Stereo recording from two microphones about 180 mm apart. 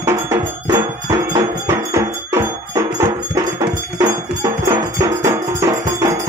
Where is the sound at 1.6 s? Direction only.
15° right (ahead or behind).